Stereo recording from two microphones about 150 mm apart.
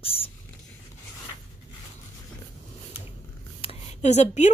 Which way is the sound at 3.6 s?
45° left (ahead or behind).